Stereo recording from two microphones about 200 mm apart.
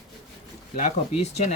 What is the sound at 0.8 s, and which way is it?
Speech, 35° left (ahead or behind).